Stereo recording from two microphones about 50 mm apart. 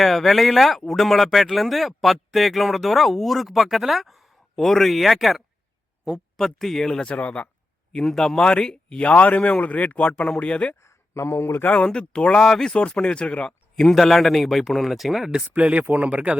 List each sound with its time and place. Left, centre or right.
0.0 s speech: centre
6.8 s speech: centre
8.0 s speech: centre
9.0 s speech: left
10.8 s a sound: left
11.7 s speech: centre
12.8 s speech: left
13.8 s speech: centre
15.8 s speech: right